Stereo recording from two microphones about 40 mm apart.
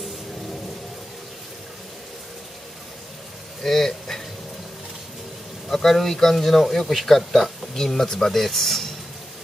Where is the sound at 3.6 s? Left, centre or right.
Centre.